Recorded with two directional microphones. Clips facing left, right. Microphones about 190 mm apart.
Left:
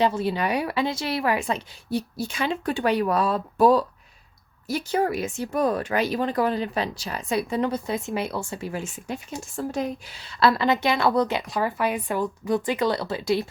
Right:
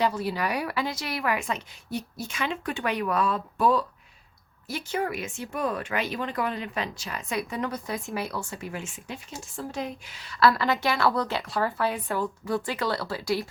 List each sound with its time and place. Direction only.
0.0 s a woman's voice: 25° left (ahead or behind)